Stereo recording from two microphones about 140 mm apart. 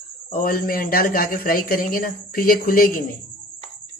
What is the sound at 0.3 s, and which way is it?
A man's voice, 90° left.